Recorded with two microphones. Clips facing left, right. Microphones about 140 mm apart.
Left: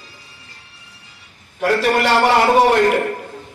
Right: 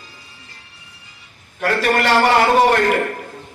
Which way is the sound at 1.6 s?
10° left (ahead or behind).